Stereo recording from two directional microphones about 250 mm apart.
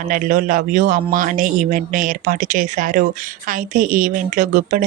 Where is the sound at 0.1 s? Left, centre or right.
Right.